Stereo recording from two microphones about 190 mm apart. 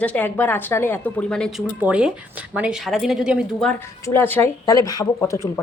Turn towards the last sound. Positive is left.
turn(degrees=15)  # may be behind; listen again after turning